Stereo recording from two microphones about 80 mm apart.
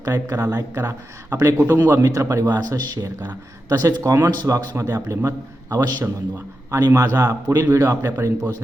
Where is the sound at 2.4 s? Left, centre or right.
Right.